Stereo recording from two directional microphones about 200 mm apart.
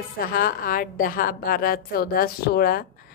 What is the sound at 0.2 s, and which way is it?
A woman's voice, 45° left (ahead or behind).